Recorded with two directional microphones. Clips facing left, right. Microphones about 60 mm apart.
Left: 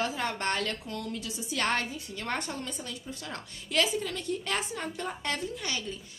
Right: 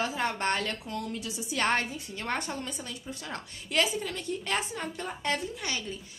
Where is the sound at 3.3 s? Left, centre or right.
Right.